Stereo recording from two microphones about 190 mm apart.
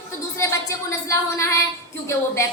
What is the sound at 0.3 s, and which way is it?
A woman's voice, 15° left (ahead or behind).